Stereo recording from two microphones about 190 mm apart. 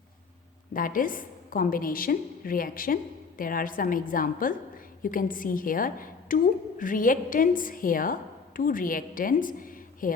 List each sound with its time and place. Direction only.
0.7 s a woman's voice: 45° left (ahead or behind)